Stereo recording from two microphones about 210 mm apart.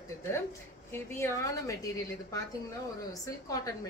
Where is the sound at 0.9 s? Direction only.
10° left (ahead or behind).